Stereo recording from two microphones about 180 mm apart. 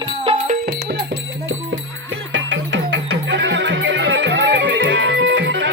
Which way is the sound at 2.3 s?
90° right.